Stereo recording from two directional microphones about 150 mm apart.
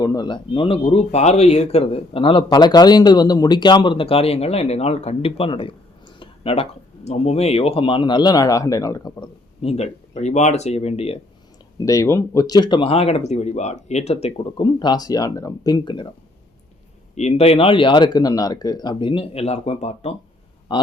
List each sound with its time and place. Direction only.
0.0 s speech: 30° left (ahead or behind)
9.6 s speech: 45° left (ahead or behind)
11.9 s speech: 20° left (ahead or behind)
17.2 s speech: 45° left (ahead or behind)
20.7 s speech: 30° left (ahead or behind)